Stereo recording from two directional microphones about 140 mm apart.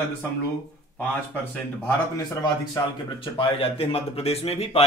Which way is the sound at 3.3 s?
45° left (ahead or behind).